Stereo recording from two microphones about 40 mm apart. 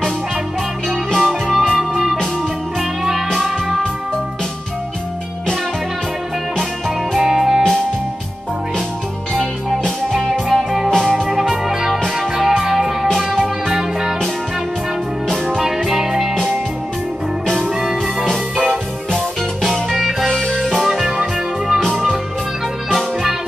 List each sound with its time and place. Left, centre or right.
1.1 s music: centre
7.2 s music: centre
9.3 s music: centre
10.9 s music: centre
11.6 s music: centre
15.6 s music: centre
17.6 s music: centre
19.7 s music: centre